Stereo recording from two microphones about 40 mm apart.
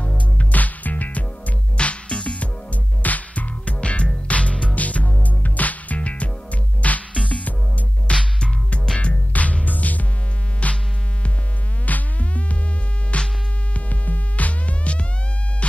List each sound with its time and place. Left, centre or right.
0.4 s music: left
1.8 s music: left
4.7 s music: left
8.1 s music: centre
8.9 s music: left
11.8 s music: left